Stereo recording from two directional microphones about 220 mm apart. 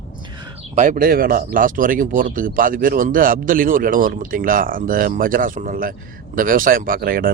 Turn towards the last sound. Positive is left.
turn(degrees=-40)  # may be behind; listen again after turning